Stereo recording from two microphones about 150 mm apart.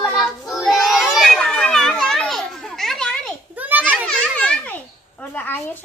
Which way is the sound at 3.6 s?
10° right (ahead or behind).